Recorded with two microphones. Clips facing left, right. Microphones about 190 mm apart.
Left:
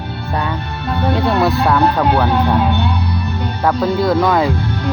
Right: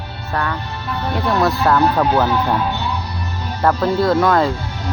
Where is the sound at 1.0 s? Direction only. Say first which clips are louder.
Left 4 dB; 60° left (ahead or behind).